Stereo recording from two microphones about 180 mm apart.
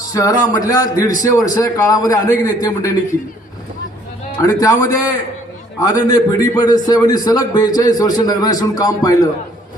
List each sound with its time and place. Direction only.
0.1 s a man's voice: 20° left (ahead or behind)
4.4 s a man's voice: 20° left (ahead or behind)